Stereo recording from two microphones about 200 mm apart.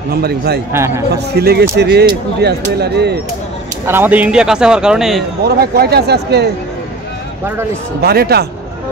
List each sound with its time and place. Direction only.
0.1 s speech: 50° right (ahead or behind)
0.7 s a man's voice: 15° right (ahead or behind)
1.1 s speech: 55° right (ahead or behind)
3.8 s speech: 10° right (ahead or behind)
5.4 s speech: 50° right (ahead or behind)
8.0 s speech: 50° right (ahead or behind)